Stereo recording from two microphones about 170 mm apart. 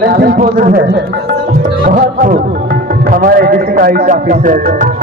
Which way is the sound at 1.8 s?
55° right (ahead or behind).